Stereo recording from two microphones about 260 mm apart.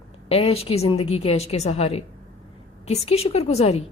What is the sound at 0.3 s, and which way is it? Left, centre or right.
A woman's voice, left.